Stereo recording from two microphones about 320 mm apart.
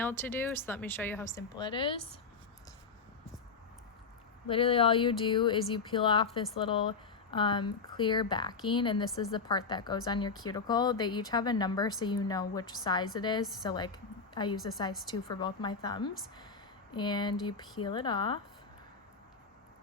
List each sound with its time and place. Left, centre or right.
0.0 s a woman's voice: centre
4.4 s a woman's voice: centre